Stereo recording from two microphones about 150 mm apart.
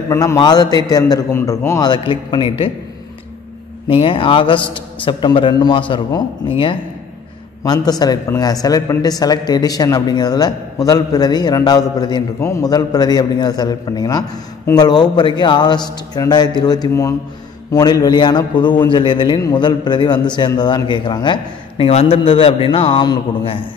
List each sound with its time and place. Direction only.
0.1 s speech: 20° left (ahead or behind)
3.9 s a man's voice: 35° left (ahead or behind)